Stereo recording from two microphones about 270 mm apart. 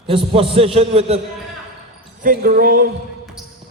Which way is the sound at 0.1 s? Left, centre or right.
Right.